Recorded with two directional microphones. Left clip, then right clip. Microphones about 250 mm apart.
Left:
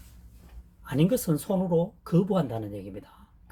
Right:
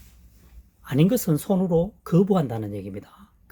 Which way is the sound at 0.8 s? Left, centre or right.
Right.